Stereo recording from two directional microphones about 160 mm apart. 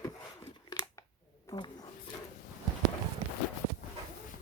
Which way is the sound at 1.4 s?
30° left (ahead or behind).